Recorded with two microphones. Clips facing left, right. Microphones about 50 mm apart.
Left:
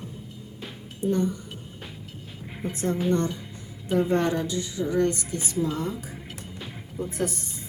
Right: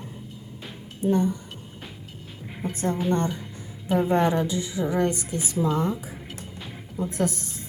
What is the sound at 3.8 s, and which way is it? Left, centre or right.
A woman's voice, centre.